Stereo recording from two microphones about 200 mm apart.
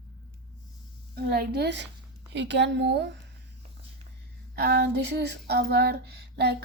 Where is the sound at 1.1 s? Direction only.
50° right (ahead or behind).